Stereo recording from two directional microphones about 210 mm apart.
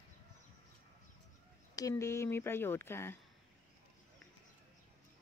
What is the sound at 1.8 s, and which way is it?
Speech, 15° left (ahead or behind).